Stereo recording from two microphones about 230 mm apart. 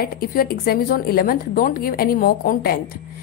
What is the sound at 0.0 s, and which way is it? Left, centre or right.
A woman's voice, left.